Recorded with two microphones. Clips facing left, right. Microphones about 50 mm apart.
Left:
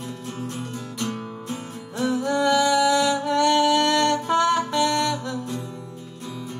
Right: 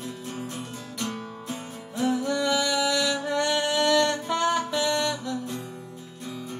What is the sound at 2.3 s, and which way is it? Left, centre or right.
Music, left.